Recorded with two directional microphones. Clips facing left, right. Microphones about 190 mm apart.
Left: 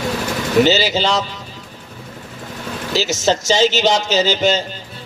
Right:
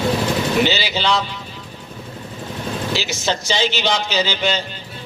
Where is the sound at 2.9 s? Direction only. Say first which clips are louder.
Left 9 dB; 40° left (ahead or behind).